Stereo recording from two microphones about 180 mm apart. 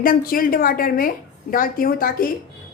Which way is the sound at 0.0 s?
55° left (ahead or behind).